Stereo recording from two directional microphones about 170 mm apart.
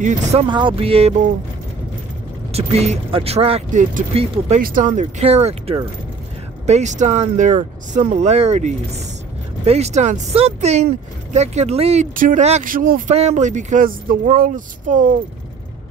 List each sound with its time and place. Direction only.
0.0 s speech: 35° right (ahead or behind)
2.5 s speech: 40° right (ahead or behind)
4.6 s speech: 55° right (ahead or behind)
13.1 s speech: 40° right (ahead or behind)